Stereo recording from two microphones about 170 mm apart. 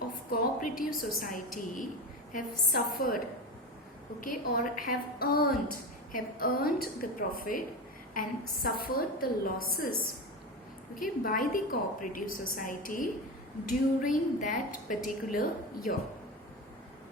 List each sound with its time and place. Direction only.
0.3 s a woman's voice: 55° left (ahead or behind)
4.2 s a woman's voice: 50° left (ahead or behind)